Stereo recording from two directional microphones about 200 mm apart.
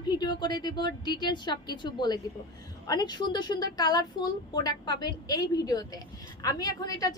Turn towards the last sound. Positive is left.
turn(degrees=20)  # may be behind; listen again after turning